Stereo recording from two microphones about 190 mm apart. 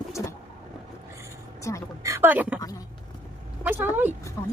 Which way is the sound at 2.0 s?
15° right (ahead or behind).